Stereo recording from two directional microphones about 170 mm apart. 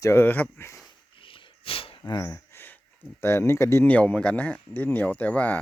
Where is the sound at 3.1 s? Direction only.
15° left (ahead or behind).